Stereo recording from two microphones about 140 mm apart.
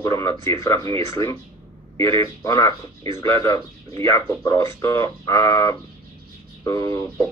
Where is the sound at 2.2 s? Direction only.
20° left (ahead or behind).